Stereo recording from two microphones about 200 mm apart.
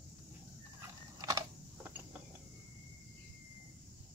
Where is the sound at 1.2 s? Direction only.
20° right (ahead or behind).